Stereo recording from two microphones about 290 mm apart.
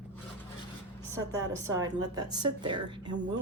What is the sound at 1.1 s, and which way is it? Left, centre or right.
A woman's voice, centre.